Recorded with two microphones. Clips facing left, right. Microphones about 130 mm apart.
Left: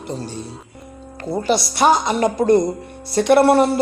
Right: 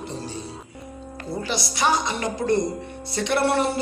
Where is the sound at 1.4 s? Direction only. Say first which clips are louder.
Left 8 dB; 50° left (ahead or behind).